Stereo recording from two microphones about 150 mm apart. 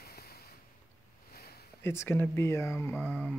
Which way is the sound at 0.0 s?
90° left.